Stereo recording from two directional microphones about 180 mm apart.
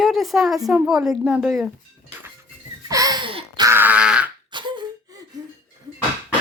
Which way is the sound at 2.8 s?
20° right (ahead or behind).